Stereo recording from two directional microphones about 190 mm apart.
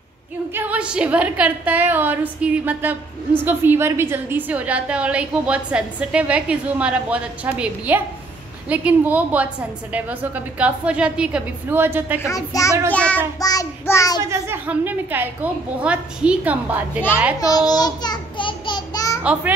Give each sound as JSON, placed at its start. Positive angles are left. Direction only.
{"t": 0.6, "sound": "a woman's voice", "side_deg": -5}
{"t": 12.2, "sound": "music", "side_deg": 15}
{"t": 13.4, "sound": "child singing", "side_deg": 20}
{"t": 14.3, "sound": "a woman's voice", "side_deg": -10}
{"t": 17.4, "sound": "a sound", "side_deg": 20}